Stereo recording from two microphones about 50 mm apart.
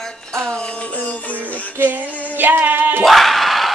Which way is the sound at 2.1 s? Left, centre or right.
Left.